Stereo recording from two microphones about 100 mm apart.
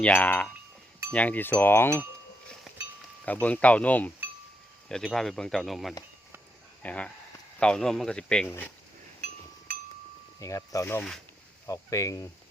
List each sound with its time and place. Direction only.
0.0 s speech: 15° left (ahead or behind)
1.1 s wind chime: 15° left (ahead or behind)
2.7 s chink: centre (ahead or behind)
3.4 s speech: 15° left (ahead or behind)
4.9 s speech: 5° left (ahead or behind)
6.8 s speech: 10° left (ahead or behind)
10.4 s speech: 35° left (ahead or behind)